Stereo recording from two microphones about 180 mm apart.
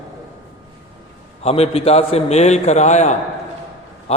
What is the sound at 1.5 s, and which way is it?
A man's voice, 35° left (ahead or behind).